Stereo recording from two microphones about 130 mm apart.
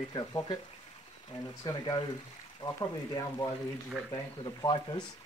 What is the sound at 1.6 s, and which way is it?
Speech, 35° left (ahead or behind).